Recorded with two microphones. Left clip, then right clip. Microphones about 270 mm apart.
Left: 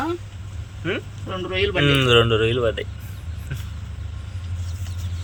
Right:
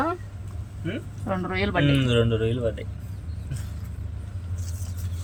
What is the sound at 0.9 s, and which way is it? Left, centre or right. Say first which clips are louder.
Speech: left 3 dB; centre.